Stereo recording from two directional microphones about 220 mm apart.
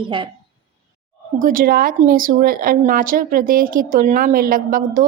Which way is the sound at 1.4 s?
40° right (ahead or behind).